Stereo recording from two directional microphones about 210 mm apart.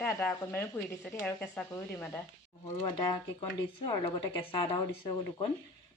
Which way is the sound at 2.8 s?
25° left (ahead or behind).